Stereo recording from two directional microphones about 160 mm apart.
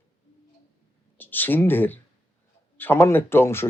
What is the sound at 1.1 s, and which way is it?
Speech, 10° left (ahead or behind).